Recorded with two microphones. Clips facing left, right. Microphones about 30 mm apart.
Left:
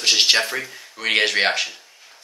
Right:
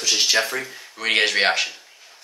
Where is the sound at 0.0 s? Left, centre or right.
Left.